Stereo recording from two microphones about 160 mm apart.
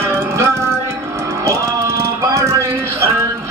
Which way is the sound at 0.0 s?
15° right (ahead or behind).